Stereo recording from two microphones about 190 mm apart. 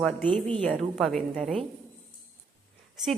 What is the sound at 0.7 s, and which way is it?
Speech, centre (ahead or behind).